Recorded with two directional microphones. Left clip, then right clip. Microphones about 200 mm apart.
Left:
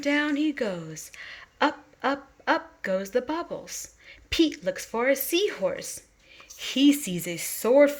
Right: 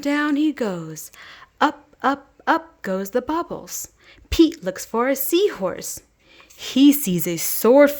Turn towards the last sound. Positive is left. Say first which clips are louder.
# right 6 dB
turn(degrees=-55)  # may be behind; listen again after turning